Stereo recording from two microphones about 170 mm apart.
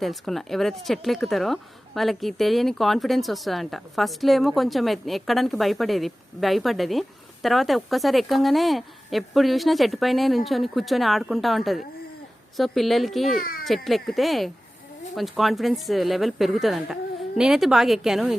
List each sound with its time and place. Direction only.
0.0 s speech: centre (ahead or behind)
13.4 s a child's voice: 60° left (ahead or behind)
13.7 s speech: centre (ahead or behind)